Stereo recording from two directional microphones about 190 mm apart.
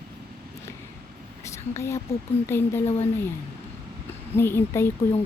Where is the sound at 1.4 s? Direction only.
15° left (ahead or behind).